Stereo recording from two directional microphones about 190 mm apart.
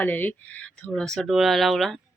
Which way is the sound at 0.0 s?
10° left (ahead or behind).